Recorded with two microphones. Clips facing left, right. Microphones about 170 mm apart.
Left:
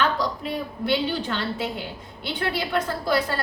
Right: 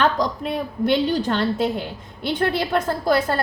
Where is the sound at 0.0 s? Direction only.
50° right (ahead or behind).